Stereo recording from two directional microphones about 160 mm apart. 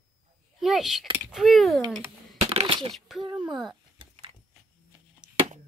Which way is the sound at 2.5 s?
35° right (ahead or behind).